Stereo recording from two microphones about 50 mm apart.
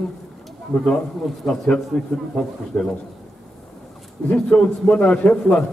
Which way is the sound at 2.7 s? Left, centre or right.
Left.